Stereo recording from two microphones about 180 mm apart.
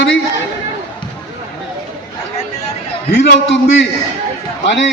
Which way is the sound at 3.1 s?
85° left.